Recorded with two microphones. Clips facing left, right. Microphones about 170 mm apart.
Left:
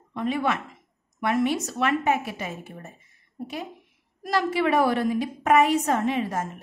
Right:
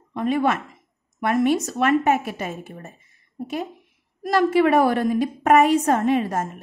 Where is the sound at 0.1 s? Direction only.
50° right (ahead or behind).